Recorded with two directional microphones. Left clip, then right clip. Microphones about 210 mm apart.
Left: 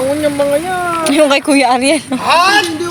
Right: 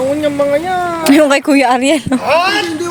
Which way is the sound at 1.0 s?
40° right (ahead or behind).